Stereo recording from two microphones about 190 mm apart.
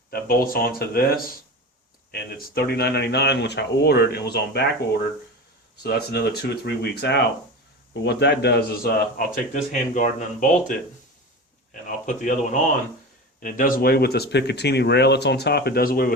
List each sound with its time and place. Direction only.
0.1 s speech: 50° left (ahead or behind)
5.8 s a man's voice: 55° left (ahead or behind)